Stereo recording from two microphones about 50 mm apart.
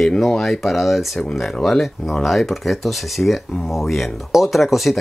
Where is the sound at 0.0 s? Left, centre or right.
Centre.